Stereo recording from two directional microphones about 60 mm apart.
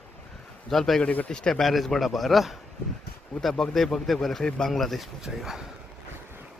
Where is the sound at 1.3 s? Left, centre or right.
Centre.